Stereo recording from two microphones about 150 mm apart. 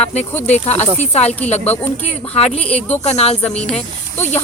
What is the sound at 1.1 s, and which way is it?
Speech, 45° left (ahead or behind).